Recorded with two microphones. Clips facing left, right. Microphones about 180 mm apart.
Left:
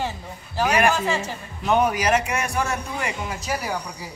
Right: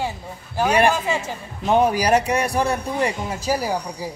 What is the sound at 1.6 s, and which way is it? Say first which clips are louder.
A man's voice: right 3 dB; 30° right (ahead or behind).